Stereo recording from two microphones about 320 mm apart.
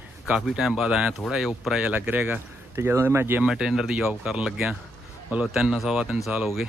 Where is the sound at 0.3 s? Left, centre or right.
Centre.